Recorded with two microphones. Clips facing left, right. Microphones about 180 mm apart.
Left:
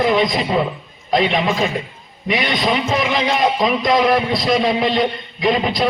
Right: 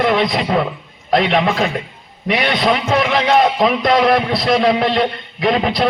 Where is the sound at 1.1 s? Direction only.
65° right (ahead or behind).